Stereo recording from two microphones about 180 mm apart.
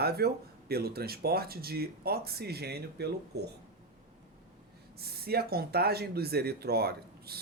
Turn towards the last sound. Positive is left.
turn(degrees=-60)  # may be behind; listen again after turning